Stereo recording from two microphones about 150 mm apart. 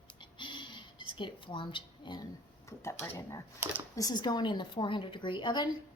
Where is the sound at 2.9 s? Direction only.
15° left (ahead or behind).